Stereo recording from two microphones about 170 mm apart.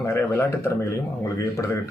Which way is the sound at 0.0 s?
15° left (ahead or behind).